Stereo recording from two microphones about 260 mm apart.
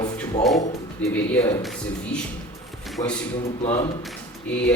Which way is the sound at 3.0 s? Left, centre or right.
Left.